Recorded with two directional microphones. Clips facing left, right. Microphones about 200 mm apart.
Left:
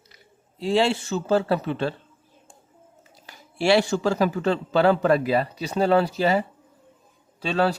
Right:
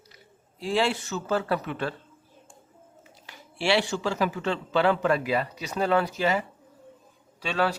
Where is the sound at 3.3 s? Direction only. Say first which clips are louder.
Left 5 dB; 40° left (ahead or behind).